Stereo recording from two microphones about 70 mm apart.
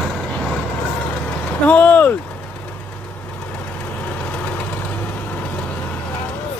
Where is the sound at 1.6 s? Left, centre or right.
Left.